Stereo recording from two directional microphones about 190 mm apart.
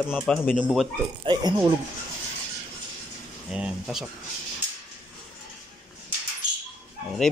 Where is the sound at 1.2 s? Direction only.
20° right (ahead or behind).